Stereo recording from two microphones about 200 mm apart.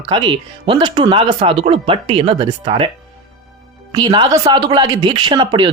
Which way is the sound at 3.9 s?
20° right (ahead or behind).